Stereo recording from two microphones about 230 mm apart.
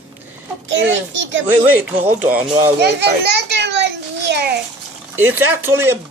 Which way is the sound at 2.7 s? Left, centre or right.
Right.